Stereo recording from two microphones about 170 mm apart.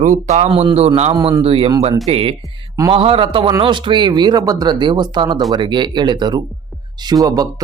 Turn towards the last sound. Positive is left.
turn(degrees=-20)  # may be behind; listen again after turning